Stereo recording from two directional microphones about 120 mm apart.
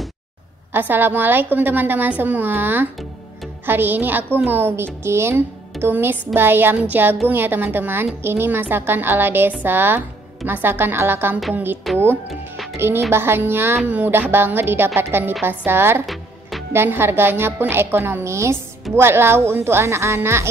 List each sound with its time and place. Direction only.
0.7 s a woman's voice: 15° right (ahead or behind)